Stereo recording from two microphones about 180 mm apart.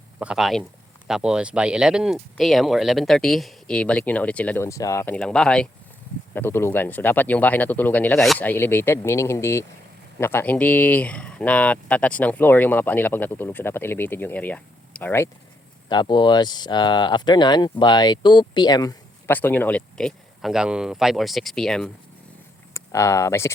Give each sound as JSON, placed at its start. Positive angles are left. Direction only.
{"t": 0.2, "sound": "speech", "side_deg": -5}
{"t": 15.9, "sound": "speech", "side_deg": 25}
{"t": 19.3, "sound": "speech", "side_deg": 10}
{"t": 22.7, "sound": "speech", "side_deg": 15}